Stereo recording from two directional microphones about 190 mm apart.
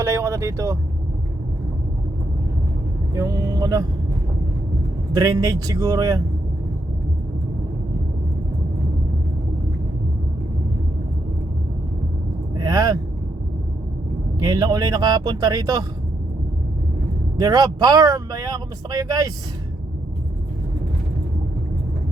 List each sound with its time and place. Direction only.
0.0 s vehicle: 15° right (ahead or behind)
3.2 s a man's voice: 20° right (ahead or behind)
5.1 s a man's voice: 15° right (ahead or behind)
12.5 s a sound: 20° right (ahead or behind)
14.3 s speech: 20° right (ahead or behind)
17.3 s speech: 20° right (ahead or behind)